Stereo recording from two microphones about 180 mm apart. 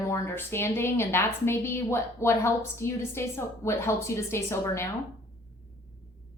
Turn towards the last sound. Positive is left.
turn(degrees=15)  # may be behind; listen again after turning